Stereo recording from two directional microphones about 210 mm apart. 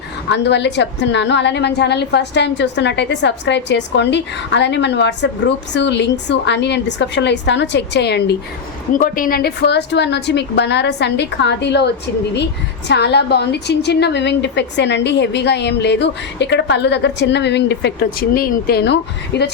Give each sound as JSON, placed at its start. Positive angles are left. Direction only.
{"t": 0.3, "sound": "a woman's voice", "side_deg": 55}
{"t": 8.9, "sound": "a woman's voice", "side_deg": 40}
{"t": 12.9, "sound": "a woman's voice", "side_deg": 55}